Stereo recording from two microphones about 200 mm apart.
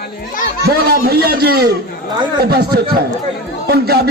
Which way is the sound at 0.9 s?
50° right (ahead or behind).